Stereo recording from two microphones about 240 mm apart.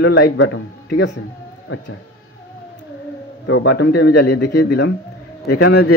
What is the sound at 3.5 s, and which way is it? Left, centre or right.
A man's voice, left.